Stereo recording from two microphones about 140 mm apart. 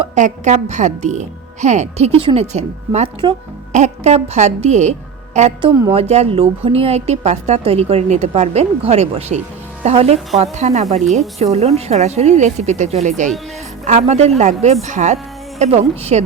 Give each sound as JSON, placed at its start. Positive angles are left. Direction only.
{"t": 0.1, "sound": "a woman's voice", "side_deg": -60}